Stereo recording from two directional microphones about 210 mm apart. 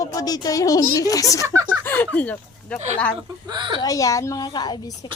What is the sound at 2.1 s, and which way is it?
Speech, 5° left (ahead or behind).